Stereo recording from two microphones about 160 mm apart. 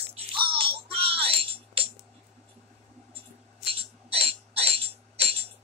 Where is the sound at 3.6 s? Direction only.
35° right (ahead or behind).